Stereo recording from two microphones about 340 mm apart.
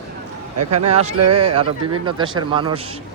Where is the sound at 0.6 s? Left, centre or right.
Right.